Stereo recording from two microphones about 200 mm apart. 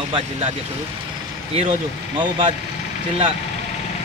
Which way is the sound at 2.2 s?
25° right (ahead or behind).